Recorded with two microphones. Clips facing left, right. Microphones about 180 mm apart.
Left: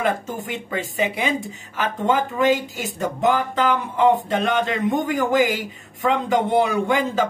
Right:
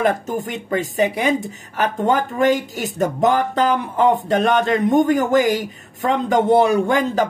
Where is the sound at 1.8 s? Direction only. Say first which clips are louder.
Right 3 dB; 40° right (ahead or behind).